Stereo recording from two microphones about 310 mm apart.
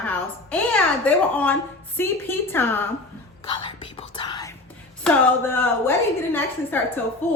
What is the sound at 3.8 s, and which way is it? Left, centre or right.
A woman's voice, centre.